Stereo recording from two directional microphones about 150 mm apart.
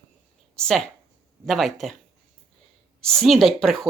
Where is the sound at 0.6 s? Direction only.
5° left (ahead or behind).